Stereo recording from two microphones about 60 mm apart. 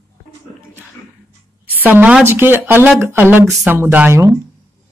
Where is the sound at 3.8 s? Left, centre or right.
Right.